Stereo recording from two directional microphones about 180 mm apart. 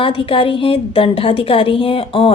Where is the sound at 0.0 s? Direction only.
30° left (ahead or behind).